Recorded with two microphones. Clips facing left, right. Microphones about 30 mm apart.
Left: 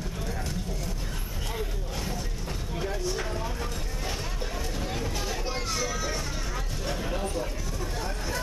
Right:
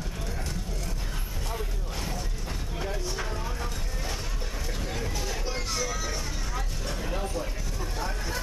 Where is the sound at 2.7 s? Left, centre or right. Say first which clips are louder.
Left 3 dB; centre.